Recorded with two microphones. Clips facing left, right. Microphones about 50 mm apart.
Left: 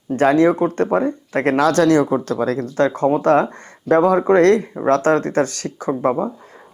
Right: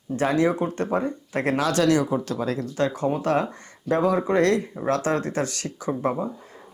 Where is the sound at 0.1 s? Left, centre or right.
Left.